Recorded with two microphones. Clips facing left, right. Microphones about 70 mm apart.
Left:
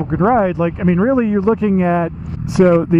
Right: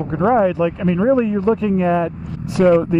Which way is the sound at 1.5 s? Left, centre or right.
Centre.